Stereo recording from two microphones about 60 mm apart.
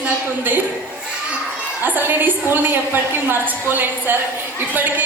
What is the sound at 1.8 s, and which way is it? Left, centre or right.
A woman's voice, right.